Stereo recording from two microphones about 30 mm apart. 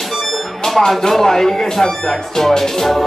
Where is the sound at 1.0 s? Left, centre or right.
Centre.